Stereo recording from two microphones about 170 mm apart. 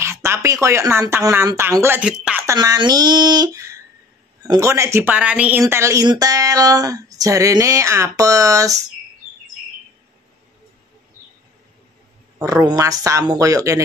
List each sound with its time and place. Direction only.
0.0 s speech: 15° right (ahead or behind)
2.4 s speech: 20° right (ahead or behind)
12.4 s speech: 20° right (ahead or behind)